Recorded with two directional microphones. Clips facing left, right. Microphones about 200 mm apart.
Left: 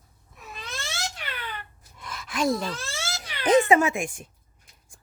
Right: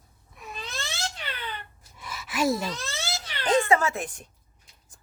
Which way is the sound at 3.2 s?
20° left (ahead or behind).